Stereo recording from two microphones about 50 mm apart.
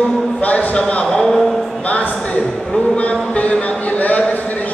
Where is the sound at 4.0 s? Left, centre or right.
Left.